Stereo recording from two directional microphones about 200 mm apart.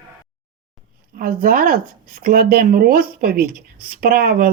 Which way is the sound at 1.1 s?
45° right (ahead or behind).